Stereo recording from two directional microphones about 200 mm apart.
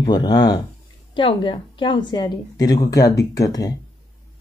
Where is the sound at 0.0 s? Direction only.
20° left (ahead or behind).